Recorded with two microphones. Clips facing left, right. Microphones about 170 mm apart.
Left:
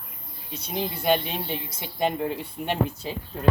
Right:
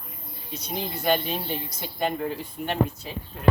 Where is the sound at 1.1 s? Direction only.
25° left (ahead or behind).